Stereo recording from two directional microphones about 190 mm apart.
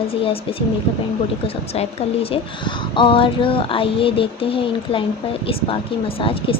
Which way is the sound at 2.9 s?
25° left (ahead or behind).